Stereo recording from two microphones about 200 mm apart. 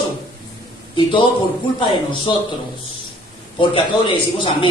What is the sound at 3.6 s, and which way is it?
Speech, 25° left (ahead or behind).